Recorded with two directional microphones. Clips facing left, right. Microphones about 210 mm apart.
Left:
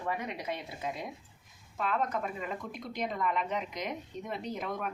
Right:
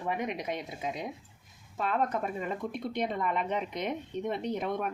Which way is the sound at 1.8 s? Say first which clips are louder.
Right 2 dB; 35° right (ahead or behind).